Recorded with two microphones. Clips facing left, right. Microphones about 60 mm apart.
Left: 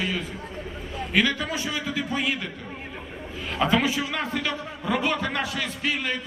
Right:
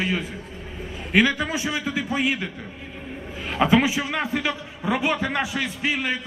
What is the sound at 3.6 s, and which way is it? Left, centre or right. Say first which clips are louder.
A man's voice: right 3 dB; centre.